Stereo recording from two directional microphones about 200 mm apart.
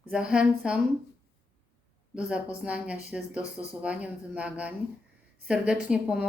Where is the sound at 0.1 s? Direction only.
5° right (ahead or behind).